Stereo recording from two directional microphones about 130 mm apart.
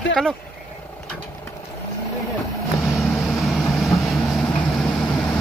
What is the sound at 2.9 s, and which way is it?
Vehicle, centre (ahead or behind).